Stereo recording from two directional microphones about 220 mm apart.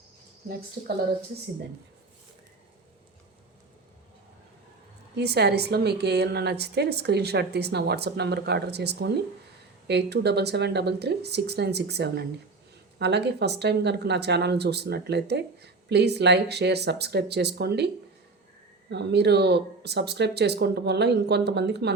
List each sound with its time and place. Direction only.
5.1 s speech: 50° right (ahead or behind)
18.9 s speech: 50° right (ahead or behind)